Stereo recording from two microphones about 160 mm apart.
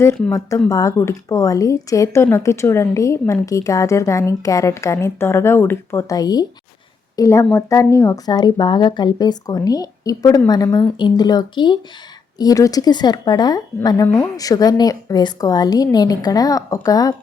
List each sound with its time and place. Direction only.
0.3 s a woman's voice: 20° left (ahead or behind)